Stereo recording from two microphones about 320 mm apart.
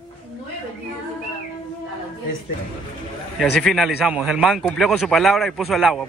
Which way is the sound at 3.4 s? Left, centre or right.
Centre.